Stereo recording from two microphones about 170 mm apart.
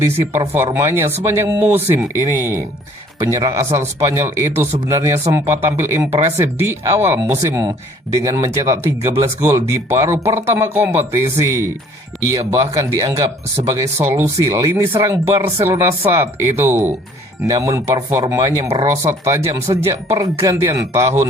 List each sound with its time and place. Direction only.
0.3 s speech: 15° right (ahead or behind)